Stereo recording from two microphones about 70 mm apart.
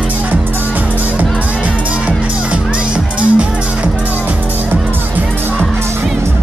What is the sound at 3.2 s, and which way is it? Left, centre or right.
Music, centre.